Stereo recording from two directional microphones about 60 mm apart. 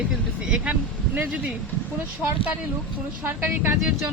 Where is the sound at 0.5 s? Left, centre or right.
Right.